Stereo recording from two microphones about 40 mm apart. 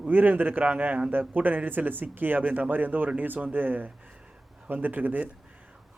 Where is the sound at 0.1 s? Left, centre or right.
Right.